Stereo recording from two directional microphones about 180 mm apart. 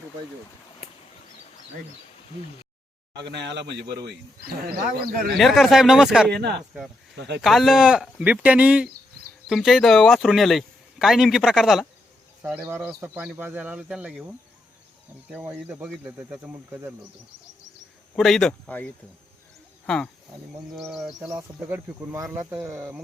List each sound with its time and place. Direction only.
3.2 s a man's voice: 75° right (ahead or behind); by 5.4 s 55° right (ahead or behind)
5.4 s speech: centre (ahead or behind)
6.3 s a man's voice: 65° right (ahead or behind)
7.4 s speech: centre (ahead or behind)
18.2 s speech: centre (ahead or behind)
21.2 s speech: 20° right (ahead or behind)